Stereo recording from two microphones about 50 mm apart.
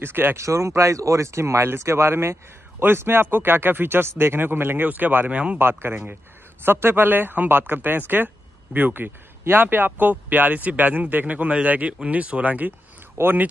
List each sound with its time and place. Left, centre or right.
0.0 s speech: right
0.4 s speech: right
2.8 s speech: right
5.6 s speech: right
9.4 s speech: right
13.2 s speech: right